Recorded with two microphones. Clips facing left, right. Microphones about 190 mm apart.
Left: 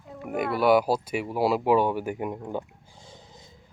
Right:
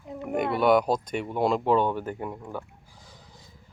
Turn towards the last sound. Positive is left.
turn(degrees=25)  # may be behind; listen again after turning